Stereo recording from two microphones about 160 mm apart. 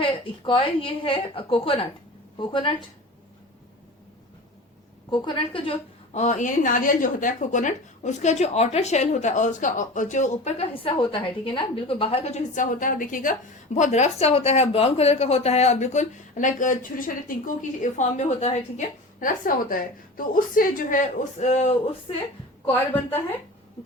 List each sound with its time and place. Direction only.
0.0 s a woman's voice: 35° left (ahead or behind)
5.1 s a woman's voice: 30° left (ahead or behind)
6.1 s a woman's voice: 50° left (ahead or behind)
13.7 s a woman's voice: 50° left (ahead or behind)
22.6 s a woman's voice: 10° left (ahead or behind)